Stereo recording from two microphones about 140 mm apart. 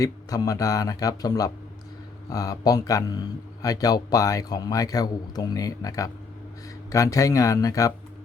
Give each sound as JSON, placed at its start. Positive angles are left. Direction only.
{"t": 0.0, "sound": "speech", "side_deg": 25}